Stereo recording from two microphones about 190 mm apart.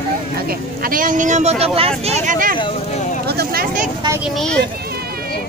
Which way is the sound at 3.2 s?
55° right (ahead or behind).